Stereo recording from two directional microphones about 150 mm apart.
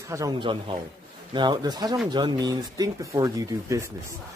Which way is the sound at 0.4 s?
35° right (ahead or behind).